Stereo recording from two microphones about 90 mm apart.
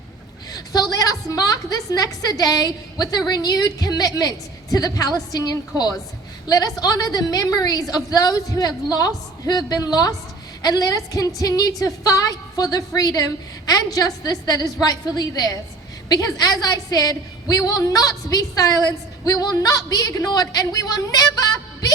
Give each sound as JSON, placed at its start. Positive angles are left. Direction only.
{"t": 0.5, "sound": "a woman's voice", "side_deg": 45}